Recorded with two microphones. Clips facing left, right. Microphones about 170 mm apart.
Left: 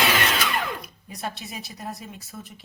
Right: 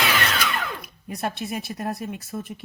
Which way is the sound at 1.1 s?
55° right (ahead or behind).